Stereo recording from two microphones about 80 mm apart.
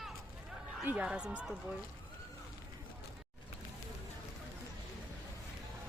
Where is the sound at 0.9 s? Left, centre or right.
Centre.